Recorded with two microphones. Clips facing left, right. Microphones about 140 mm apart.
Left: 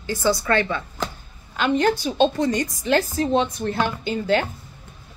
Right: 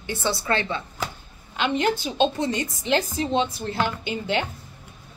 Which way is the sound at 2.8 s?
20° right (ahead or behind).